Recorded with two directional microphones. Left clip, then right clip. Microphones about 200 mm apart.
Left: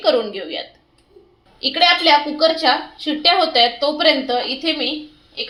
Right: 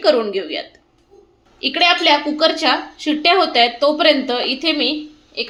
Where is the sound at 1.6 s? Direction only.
30° right (ahead or behind).